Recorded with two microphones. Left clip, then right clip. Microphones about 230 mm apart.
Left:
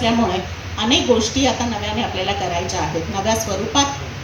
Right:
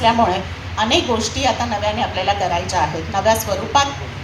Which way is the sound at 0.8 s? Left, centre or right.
Right.